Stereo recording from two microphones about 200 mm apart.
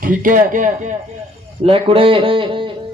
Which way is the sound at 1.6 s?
25° right (ahead or behind).